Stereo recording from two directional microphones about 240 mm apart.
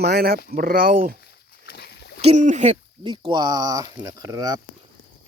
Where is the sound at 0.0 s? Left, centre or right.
Right.